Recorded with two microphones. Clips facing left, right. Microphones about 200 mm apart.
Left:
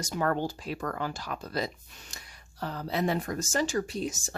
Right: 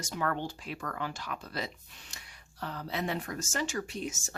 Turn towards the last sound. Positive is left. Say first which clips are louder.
# left 4 dB
turn(degrees=35)  # may be behind; listen again after turning